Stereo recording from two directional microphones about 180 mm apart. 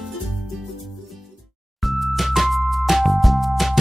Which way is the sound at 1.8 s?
Centre (ahead or behind).